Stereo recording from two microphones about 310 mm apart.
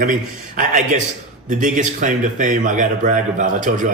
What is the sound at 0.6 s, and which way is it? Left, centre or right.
A man's voice, right.